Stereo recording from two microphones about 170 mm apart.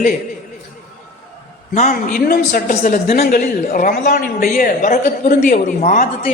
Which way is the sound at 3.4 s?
55° left (ahead or behind).